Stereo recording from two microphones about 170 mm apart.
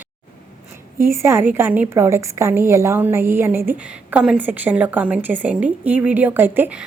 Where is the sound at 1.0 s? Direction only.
15° right (ahead or behind).